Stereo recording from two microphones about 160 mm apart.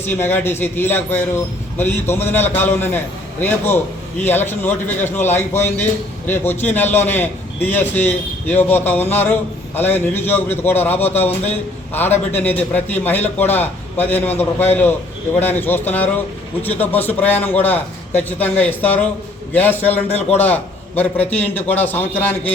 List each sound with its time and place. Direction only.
0.0 s a man's voice: 15° left (ahead or behind)
4.2 s a man's voice: 15° left (ahead or behind)
20.1 s a man's voice: 40° left (ahead or behind)
20.4 s a man's voice: 10° left (ahead or behind)